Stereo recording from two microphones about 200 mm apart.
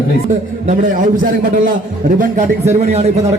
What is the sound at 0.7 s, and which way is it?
A man's voice, 40° right (ahead or behind).